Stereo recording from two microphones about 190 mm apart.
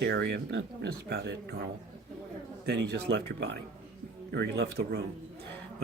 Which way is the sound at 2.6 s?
60° right (ahead or behind).